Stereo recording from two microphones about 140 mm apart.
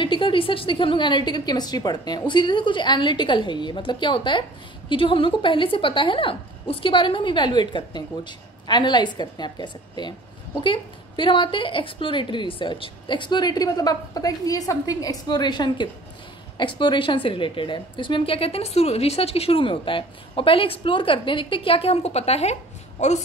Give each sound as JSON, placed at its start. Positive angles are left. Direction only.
{"t": 0.0, "sound": "a woman's voice", "side_deg": 40}